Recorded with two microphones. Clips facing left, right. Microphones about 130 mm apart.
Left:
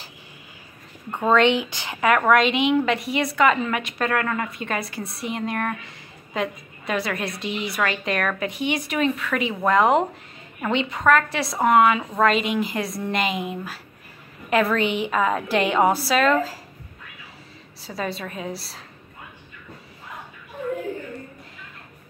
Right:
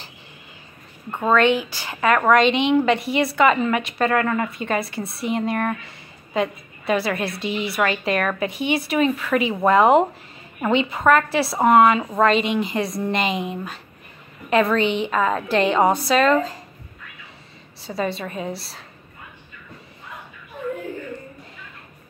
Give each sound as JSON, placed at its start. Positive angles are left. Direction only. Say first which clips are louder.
{"t": 1.3, "sound": "speech", "louder": "right 1 dB", "side_deg": 20}
{"t": 2.0, "sound": "a woman's voice", "louder": "right 1 dB", "side_deg": 5}
{"t": 17.8, "sound": "a woman's voice", "louder": "right 4 dB", "side_deg": 0}